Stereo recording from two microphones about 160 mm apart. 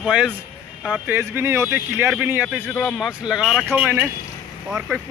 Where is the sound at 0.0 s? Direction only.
5° right (ahead or behind).